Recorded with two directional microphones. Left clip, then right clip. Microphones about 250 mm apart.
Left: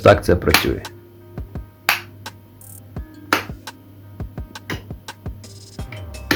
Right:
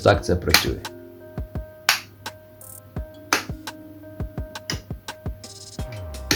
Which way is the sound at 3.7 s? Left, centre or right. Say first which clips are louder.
Right 2 dB; centre.